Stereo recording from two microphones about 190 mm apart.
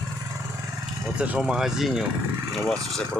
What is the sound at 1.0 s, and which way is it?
Speech, 5° right (ahead or behind).